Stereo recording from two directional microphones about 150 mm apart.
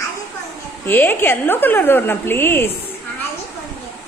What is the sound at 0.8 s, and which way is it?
A woman's voice, 15° left (ahead or behind).